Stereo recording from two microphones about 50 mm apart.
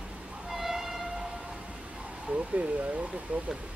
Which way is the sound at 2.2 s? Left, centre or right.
Right.